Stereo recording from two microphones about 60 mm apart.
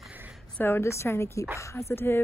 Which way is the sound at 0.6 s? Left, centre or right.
Left.